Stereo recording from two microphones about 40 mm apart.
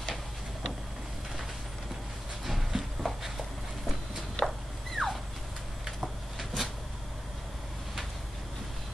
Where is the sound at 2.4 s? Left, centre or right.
Centre.